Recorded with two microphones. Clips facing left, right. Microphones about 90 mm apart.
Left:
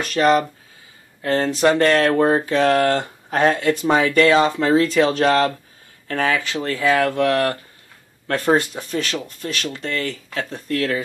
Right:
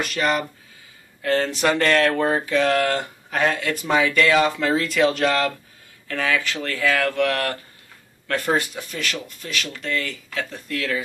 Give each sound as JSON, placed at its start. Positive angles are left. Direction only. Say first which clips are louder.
{"t": 0.0, "sound": "speech", "louder": "left 6 dB", "side_deg": 35}